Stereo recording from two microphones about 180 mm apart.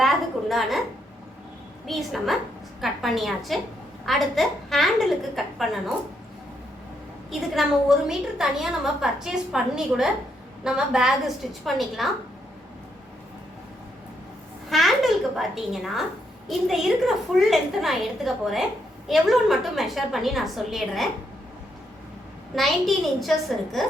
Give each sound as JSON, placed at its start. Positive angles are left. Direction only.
{"t": 0.0, "sound": "a sound", "side_deg": 0}
{"t": 1.9, "sound": "a woman's voice", "side_deg": 0}
{"t": 7.3, "sound": "a woman's voice", "side_deg": 0}
{"t": 14.7, "sound": "a woman's voice", "side_deg": 0}
{"t": 22.5, "sound": "a woman's voice", "side_deg": 0}